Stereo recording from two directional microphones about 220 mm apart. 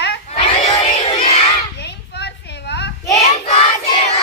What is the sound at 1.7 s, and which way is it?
Children playing, 50° left (ahead or behind).